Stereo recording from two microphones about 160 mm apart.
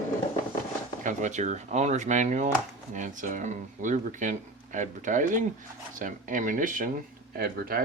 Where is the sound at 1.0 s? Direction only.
50° right (ahead or behind).